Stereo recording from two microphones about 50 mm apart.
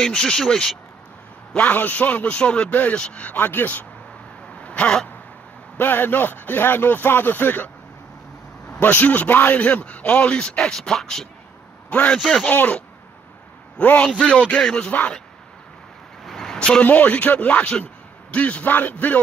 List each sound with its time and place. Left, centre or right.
0.0 s speech: centre
1.6 s a man's voice: left; by 2.7 s centre
2.7 s a man's voice: left
4.6 s a sound: left
5.8 s speech: left
8.7 s a man's voice: left; by 11.2 s centre
12.4 s a man's voice: left
14.9 s speech: left
16.3 s vehicle: centre
16.5 s speech: centre
16.8 s a man's voice: left